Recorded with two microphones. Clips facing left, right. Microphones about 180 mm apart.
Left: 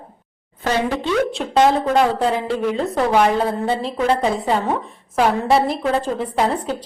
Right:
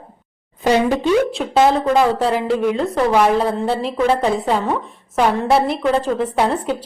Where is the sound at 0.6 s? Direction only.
15° right (ahead or behind).